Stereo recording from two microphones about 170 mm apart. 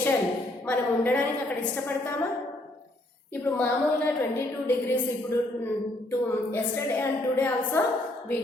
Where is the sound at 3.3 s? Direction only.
10° left (ahead or behind).